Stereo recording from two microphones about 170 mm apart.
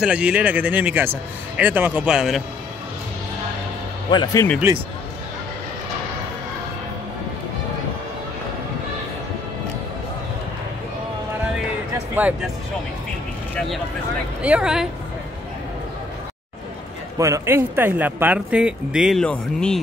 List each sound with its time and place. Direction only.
0.0 s speech: 5° right (ahead or behind)
4.1 s speech: 25° left (ahead or behind)
12.2 s speech: 10° right (ahead or behind)
14.4 s speech: 5° right (ahead or behind)
17.2 s speech: 15° right (ahead or behind); by 19.8 s 5° left (ahead or behind)